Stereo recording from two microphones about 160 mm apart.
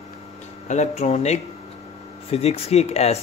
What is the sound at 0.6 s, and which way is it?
Speech, 45° left (ahead or behind).